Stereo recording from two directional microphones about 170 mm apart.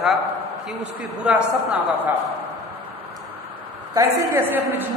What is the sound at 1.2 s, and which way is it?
Speech, 10° right (ahead or behind).